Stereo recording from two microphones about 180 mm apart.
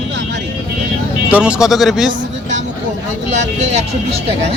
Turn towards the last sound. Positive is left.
turn(degrees=-35)  # may be behind; listen again after turning